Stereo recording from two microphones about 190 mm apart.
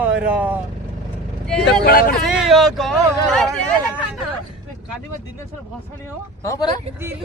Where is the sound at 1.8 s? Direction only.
50° left (ahead or behind).